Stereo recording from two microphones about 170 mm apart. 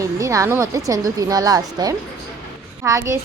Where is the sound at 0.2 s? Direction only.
20° right (ahead or behind).